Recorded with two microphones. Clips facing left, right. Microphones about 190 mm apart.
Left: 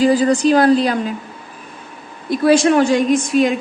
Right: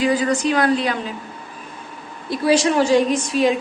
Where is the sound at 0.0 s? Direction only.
35° left (ahead or behind).